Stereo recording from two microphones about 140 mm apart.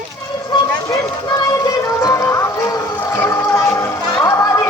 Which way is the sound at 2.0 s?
25° left (ahead or behind).